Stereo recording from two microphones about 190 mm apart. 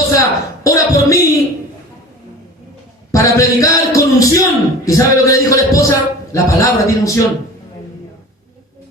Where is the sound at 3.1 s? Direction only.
15° left (ahead or behind).